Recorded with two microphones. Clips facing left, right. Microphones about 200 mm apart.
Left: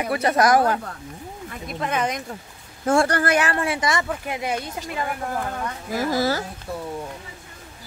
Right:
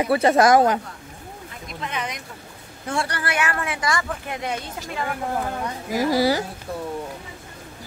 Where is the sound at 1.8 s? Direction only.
45° left (ahead or behind); by 4.0 s 25° left (ahead or behind).